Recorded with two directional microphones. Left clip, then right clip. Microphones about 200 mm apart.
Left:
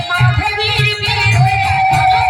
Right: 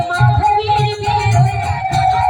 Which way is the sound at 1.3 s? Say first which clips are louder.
Left 5 dB; 50° right (ahead or behind).